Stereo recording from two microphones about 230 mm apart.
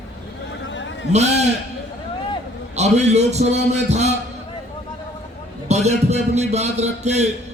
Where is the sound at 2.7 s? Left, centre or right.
Right.